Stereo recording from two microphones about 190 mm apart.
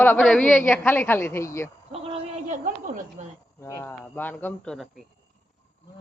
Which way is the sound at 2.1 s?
45° right (ahead or behind).